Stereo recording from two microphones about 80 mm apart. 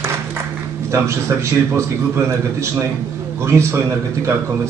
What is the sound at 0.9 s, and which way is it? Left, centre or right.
A man's voice, right.